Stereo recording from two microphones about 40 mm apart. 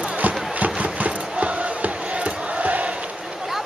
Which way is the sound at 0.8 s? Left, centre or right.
Right.